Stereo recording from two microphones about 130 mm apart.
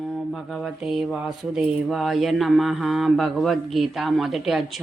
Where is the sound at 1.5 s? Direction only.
Centre (ahead or behind).